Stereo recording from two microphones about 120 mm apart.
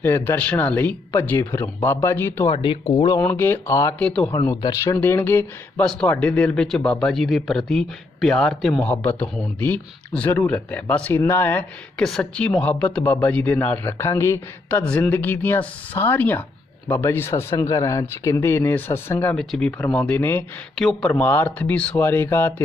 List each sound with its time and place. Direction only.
0.0 s speech: 15° left (ahead or behind)
2.5 s speech: 45° left (ahead or behind)
3.2 s speech: 15° left (ahead or behind)
4.0 s speech: 10° left (ahead or behind)
4.6 s speech: 30° left (ahead or behind)
4.9 s speech: 15° left (ahead or behind)
12.0 s speech: 5° left (ahead or behind)
19.4 s speech: 5° left (ahead or behind)
20.7 s speech: centre (ahead or behind)
21.1 s speech: 15° left (ahead or behind)